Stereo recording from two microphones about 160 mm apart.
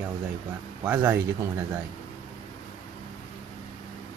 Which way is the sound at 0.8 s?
10° right (ahead or behind).